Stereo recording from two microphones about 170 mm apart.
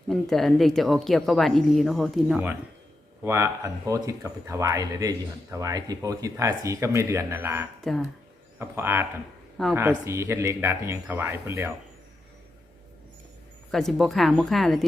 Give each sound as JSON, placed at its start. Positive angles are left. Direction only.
{"t": 0.1, "sound": "speech", "side_deg": 0}
{"t": 13.7, "sound": "speech", "side_deg": 0}